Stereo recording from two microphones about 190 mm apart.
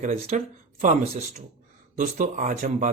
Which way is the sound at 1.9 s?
40° right (ahead or behind).